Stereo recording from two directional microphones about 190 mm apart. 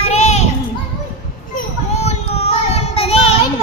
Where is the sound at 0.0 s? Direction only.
35° left (ahead or behind).